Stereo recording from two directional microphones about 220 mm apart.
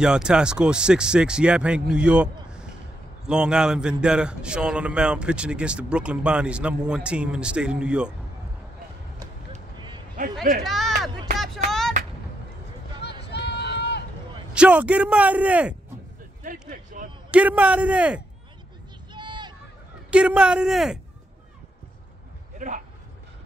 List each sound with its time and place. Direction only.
0.0 s a man's voice: 5° right (ahead or behind)
3.3 s a man's voice: 5° right (ahead or behind)
9.8 s a sound: 20° right (ahead or behind)
10.6 s speech: centre (ahead or behind)
11.3 s vehicle: centre (ahead or behind)
13.2 s run: 50° left (ahead or behind)
14.5 s a man's voice: 5° right (ahead or behind)
16.6 s a sound: 40° right (ahead or behind)
17.3 s a man's voice: 5° right (ahead or behind)
19.1 s a sound: 20° right (ahead or behind)
20.1 s a man's voice: 5° right (ahead or behind)
22.6 s a sound: 35° right (ahead or behind)